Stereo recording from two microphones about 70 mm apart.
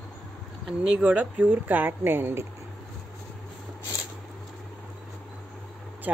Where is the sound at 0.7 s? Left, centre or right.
Centre; by 2.4 s right.